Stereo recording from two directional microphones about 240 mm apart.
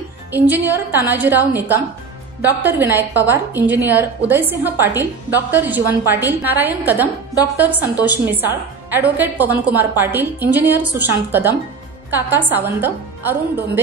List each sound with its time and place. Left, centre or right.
0.3 s a woman's voice: centre